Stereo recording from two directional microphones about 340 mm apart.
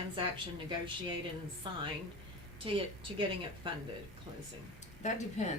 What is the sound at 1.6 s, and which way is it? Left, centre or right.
A woman's voice, centre.